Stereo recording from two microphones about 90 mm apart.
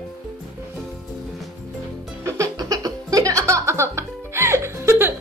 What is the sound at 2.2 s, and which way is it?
Music, 35° right (ahead or behind).